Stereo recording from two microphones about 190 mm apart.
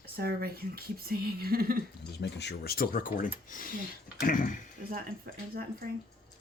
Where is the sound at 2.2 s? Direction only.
65° left (ahead or behind); by 4.5 s 45° left (ahead or behind).